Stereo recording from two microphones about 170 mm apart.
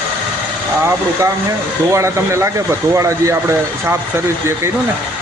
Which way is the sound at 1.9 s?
15° right (ahead or behind).